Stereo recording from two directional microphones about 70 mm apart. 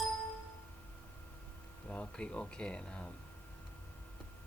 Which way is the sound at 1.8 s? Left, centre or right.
Centre.